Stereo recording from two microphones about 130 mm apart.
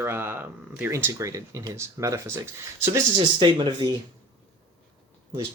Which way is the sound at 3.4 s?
40° right (ahead or behind).